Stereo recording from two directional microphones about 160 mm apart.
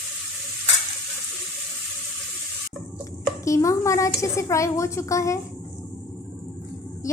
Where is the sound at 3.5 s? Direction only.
20° left (ahead or behind).